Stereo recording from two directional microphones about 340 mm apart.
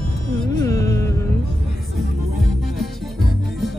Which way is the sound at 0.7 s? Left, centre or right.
Centre.